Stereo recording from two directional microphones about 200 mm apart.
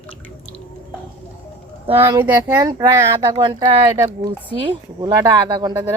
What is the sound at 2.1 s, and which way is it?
Speech, 10° right (ahead or behind).